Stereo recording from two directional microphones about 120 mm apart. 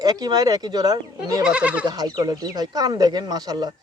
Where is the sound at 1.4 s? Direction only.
10° right (ahead or behind).